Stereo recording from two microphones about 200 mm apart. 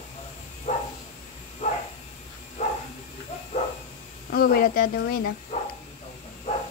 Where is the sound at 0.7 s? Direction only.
35° left (ahead or behind).